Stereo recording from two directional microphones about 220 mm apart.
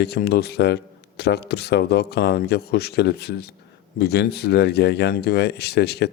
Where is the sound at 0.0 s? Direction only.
45° left (ahead or behind).